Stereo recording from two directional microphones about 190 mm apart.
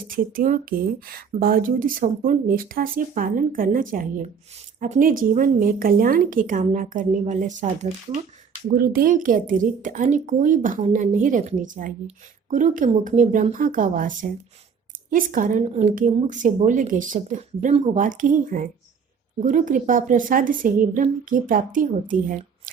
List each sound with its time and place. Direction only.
0.3 s speech: 45° right (ahead or behind)
8.6 s speech: 50° right (ahead or behind)